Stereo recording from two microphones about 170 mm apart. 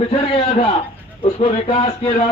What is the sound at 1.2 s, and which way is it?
Speech, 40° left (ahead or behind).